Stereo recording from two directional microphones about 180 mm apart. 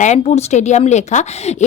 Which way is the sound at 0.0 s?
40° left (ahead or behind).